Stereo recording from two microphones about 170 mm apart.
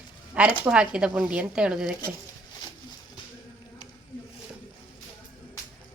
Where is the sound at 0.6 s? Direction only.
5° right (ahead or behind).